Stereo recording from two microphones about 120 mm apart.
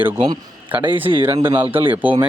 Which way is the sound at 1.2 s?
20° right (ahead or behind).